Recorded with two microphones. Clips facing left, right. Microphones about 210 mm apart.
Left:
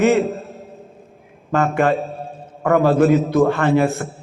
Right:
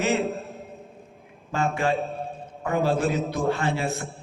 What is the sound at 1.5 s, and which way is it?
A man's voice, 60° left (ahead or behind).